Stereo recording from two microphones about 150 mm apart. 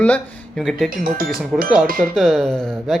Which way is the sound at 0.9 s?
70° right (ahead or behind).